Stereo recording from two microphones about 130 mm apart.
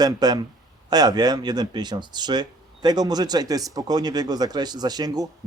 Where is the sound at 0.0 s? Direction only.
30° right (ahead or behind).